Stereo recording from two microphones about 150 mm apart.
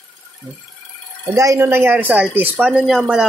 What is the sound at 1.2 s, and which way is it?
Speech, 20° right (ahead or behind).